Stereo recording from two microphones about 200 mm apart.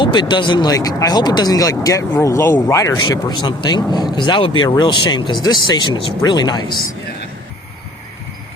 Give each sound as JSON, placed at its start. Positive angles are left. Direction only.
{"t": 0.0, "sound": "speech", "side_deg": 25}